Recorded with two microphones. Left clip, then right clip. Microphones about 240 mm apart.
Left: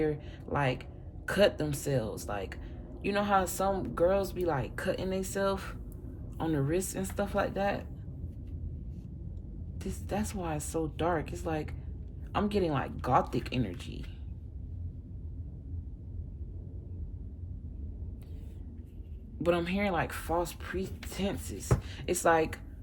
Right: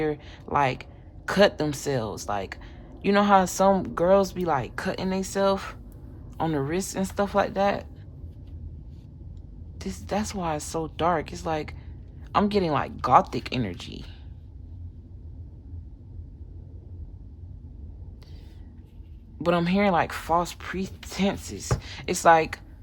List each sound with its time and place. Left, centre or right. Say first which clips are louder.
0.0 s a woman's voice: right 4 dB; right
9.7 s a woman's voice: right 7 dB; right
19.4 s a woman's voice: right 6 dB; centre